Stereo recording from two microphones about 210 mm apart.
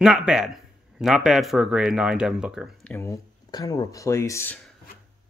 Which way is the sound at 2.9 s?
15° left (ahead or behind).